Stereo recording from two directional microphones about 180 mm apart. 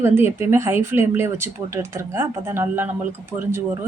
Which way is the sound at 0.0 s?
15° right (ahead or behind).